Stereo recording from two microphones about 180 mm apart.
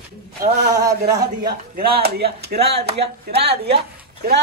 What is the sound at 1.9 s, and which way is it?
Speech, 60° right (ahead or behind).